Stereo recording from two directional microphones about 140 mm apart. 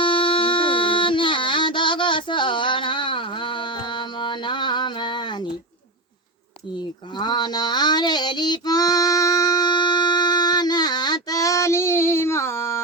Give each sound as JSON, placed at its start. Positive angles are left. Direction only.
{"t": 0.0, "sound": "music", "side_deg": 40}
{"t": 7.2, "sound": "child singing", "side_deg": 30}